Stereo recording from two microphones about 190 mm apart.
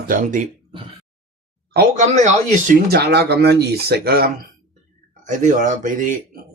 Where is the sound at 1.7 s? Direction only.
50° right (ahead or behind).